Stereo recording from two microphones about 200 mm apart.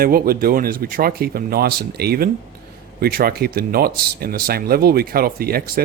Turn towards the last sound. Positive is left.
turn(degrees=-50)  # may be behind; listen again after turning